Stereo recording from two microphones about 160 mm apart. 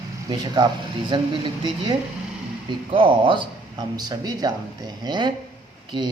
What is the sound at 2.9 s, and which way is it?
Speech, 30° right (ahead or behind).